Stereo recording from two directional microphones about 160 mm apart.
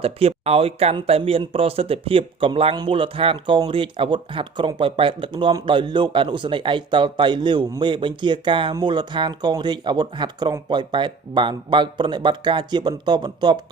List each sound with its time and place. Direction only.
0.0 s speech: 35° right (ahead or behind)